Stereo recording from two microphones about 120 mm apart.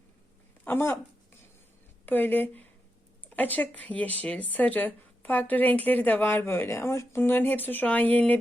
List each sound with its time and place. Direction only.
0.6 s speech: 20° left (ahead or behind)
2.0 s speech: 15° left (ahead or behind)